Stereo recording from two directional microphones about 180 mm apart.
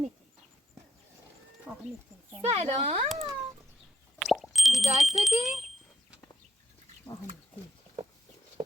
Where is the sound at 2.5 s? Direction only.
35° right (ahead or behind).